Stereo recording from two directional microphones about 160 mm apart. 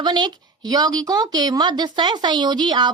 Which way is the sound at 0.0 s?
30° right (ahead or behind).